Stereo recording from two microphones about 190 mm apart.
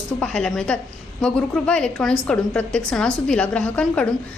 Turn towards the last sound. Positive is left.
turn(degrees=5)  # may be behind; listen again after turning